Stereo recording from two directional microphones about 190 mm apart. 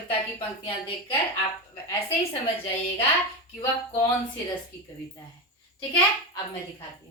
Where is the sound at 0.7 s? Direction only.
30° left (ahead or behind).